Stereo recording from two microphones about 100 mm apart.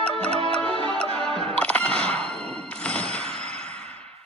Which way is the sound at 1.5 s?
15° left (ahead or behind).